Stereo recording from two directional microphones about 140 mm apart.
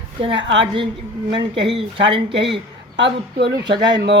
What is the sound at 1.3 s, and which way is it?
Speech, 35° right (ahead or behind).